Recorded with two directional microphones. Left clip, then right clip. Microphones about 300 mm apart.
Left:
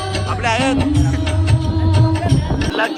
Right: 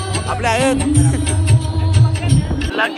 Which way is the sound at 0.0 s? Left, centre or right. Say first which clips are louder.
Left 1 dB; left.